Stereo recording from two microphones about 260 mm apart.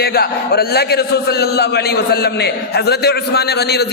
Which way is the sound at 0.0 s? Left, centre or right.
Left.